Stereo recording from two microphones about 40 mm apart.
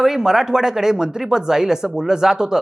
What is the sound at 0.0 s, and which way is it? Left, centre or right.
Speech, centre.